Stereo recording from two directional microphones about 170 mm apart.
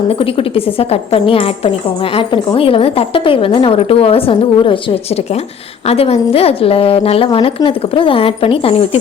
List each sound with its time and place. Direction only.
0.1 s a woman's voice: 35° left (ahead or behind)